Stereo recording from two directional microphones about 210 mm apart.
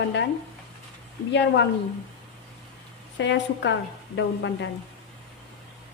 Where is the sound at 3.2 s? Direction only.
60° left (ahead or behind).